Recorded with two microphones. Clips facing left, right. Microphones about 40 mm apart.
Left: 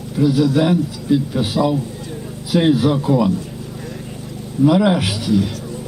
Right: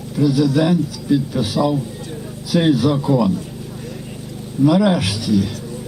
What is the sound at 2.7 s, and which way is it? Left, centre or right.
Speech, left.